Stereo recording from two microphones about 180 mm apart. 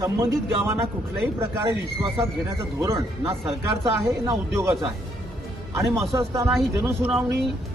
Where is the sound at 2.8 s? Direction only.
15° right (ahead or behind).